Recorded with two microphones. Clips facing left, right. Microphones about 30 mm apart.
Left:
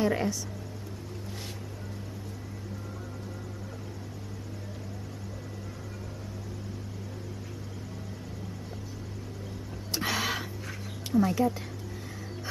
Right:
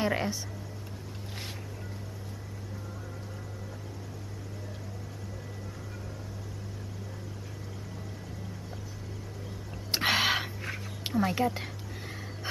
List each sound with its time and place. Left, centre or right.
0.0 s speech: centre
9.8 s a sound: right
11.1 s a woman's voice: right